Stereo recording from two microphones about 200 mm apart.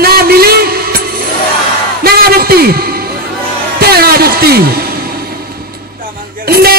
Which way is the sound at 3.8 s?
50° right (ahead or behind).